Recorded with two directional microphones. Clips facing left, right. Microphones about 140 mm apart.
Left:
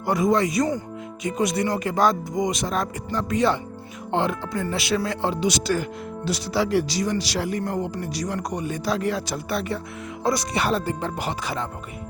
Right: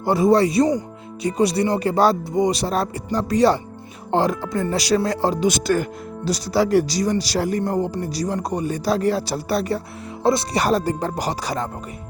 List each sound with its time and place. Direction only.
0.0 s speech: 30° right (ahead or behind)
10.2 s speech: 25° right (ahead or behind)
10.6 s speech: 40° right (ahead or behind)